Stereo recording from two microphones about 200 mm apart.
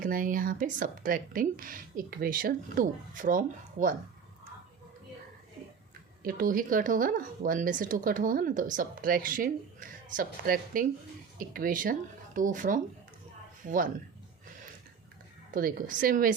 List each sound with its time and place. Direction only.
0.0 s speech: 40° right (ahead or behind)
6.2 s speech: 45° right (ahead or behind)
15.5 s speech: 45° right (ahead or behind)